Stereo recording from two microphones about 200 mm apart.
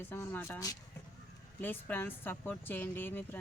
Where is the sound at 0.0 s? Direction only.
10° left (ahead or behind).